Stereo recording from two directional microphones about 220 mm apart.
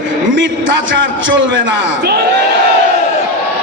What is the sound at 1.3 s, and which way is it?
Speech, 55° right (ahead or behind).